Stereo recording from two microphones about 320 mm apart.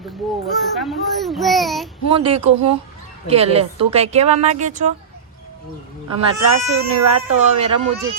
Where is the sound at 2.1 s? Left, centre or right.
Centre.